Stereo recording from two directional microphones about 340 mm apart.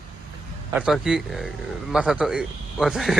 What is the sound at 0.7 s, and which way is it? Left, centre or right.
A man's voice, centre.